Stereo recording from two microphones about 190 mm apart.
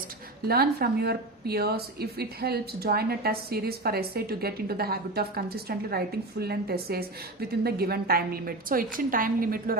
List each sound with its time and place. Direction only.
0.4 s a woman's voice: 55° right (ahead or behind)